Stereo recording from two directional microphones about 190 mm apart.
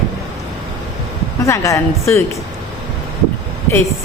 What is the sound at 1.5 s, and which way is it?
Speech, 15° left (ahead or behind).